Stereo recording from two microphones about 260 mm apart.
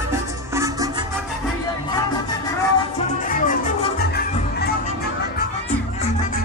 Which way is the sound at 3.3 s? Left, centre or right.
Left.